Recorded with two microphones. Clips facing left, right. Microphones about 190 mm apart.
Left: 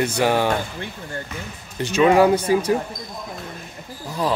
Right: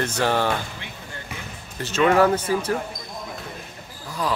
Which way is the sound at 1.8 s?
10° left (ahead or behind).